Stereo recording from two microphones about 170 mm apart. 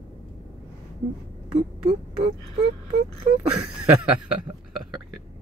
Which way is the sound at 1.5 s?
30° right (ahead or behind).